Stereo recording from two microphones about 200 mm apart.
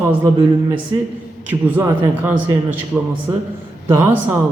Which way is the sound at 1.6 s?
10° right (ahead or behind).